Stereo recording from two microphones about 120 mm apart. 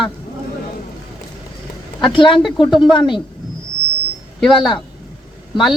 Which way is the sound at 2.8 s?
40° left (ahead or behind).